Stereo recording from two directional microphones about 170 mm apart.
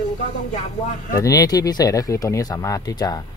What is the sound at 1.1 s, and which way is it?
Speech, 20° left (ahead or behind).